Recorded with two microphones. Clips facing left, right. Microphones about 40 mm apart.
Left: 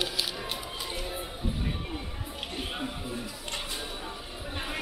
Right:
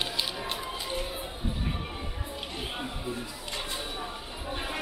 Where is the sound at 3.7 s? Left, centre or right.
Centre.